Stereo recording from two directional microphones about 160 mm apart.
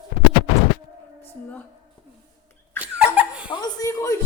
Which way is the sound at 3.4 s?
25° left (ahead or behind).